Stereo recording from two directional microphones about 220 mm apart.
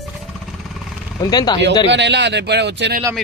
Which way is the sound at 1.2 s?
15° left (ahead or behind).